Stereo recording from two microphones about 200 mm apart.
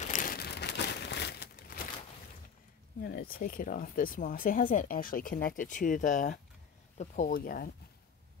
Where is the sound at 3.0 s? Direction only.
45° left (ahead or behind).